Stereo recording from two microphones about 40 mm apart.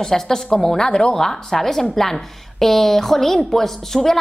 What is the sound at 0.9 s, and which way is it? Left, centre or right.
Speech, left.